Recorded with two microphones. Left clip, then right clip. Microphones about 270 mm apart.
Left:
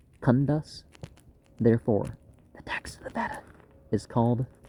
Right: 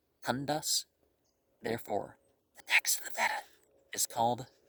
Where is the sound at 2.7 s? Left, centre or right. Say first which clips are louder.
Right 6 dB; right.